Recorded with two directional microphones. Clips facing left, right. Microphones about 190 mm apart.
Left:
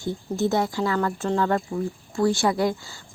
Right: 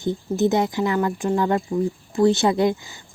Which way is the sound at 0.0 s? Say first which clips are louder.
Right 4 dB; 20° right (ahead or behind).